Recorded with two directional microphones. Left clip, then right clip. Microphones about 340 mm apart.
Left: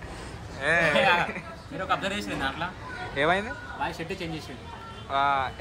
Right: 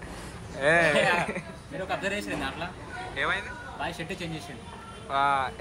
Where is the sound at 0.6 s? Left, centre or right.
Centre.